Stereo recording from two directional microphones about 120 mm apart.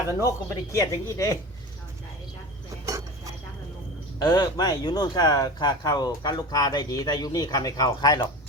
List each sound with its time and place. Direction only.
0.3 s speech: 25° left (ahead or behind)
4.2 s speech: 40° left (ahead or behind)